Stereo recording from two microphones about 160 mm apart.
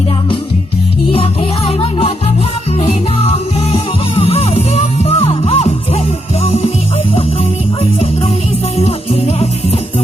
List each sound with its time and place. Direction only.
1.1 s music: 35° left (ahead or behind)
7.8 s music: 40° left (ahead or behind)